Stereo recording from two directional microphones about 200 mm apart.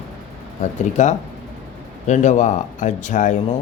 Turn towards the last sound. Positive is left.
turn(degrees=40)  # may be behind; listen again after turning